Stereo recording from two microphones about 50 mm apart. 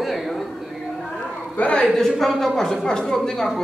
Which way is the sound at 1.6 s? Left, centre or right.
Left.